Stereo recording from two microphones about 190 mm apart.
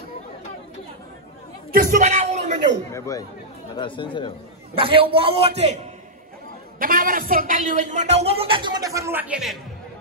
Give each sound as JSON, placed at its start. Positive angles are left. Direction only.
{"t": 1.7, "sound": "music", "side_deg": -50}
{"t": 2.9, "sound": "speech", "side_deg": 15}
{"t": 4.7, "sound": "a man's voice", "side_deg": -30}
{"t": 6.8, "sound": "a man's voice", "side_deg": -45}